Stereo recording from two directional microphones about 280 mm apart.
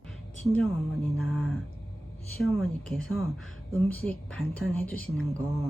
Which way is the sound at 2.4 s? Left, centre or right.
Centre.